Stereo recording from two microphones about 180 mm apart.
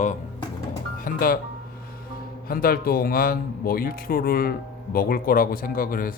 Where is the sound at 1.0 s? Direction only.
55° left (ahead or behind).